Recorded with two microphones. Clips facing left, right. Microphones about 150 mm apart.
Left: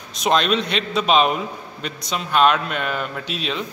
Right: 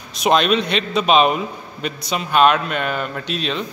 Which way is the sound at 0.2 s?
5° right (ahead or behind).